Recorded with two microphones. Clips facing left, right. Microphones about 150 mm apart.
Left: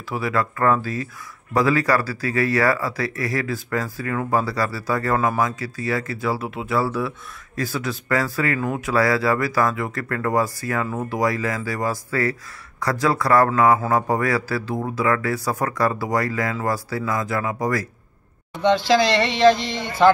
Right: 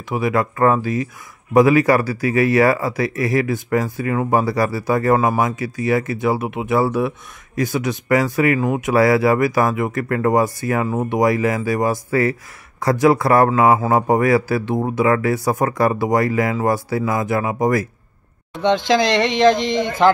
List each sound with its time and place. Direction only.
0.1 s speech: 20° right (ahead or behind)